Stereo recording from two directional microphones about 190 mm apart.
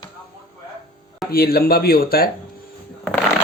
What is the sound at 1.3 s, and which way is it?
Speech, 55° left (ahead or behind).